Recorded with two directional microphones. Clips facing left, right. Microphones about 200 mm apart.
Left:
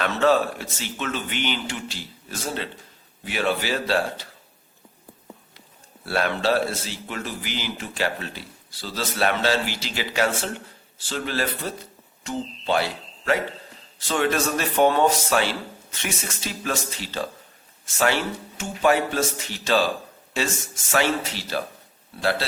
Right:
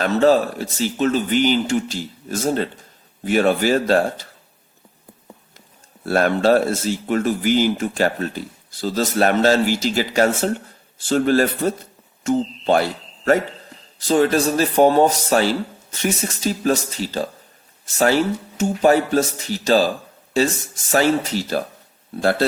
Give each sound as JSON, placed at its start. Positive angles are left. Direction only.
{"t": 0.0, "sound": "a man's voice", "side_deg": -40}
{"t": 6.1, "sound": "a man's voice", "side_deg": -45}